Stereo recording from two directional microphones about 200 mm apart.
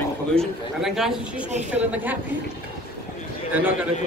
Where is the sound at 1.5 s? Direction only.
35° right (ahead or behind).